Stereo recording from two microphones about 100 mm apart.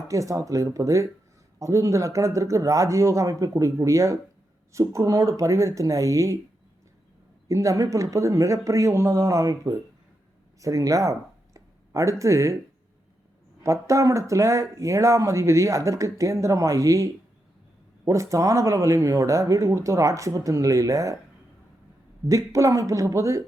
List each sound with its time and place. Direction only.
0.1 s speech: 35° right (ahead or behind)
7.4 s speech: 30° right (ahead or behind)
10.6 s a sound: 35° right (ahead or behind)
12.2 s speech: 30° right (ahead or behind)
13.6 s speech: 30° right (ahead or behind)
22.3 s speech: 30° right (ahead or behind)